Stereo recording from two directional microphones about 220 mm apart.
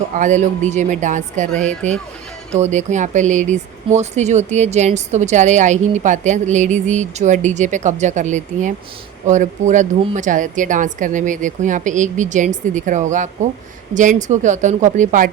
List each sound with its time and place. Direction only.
0.2 s speech: 35° right (ahead or behind)